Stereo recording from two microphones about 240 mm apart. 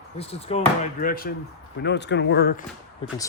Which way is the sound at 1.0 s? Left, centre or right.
Left.